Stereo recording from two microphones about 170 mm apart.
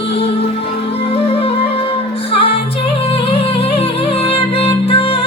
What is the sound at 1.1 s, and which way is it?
Music, 35° left (ahead or behind).